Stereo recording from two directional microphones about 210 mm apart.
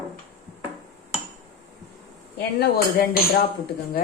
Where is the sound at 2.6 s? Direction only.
45° left (ahead or behind).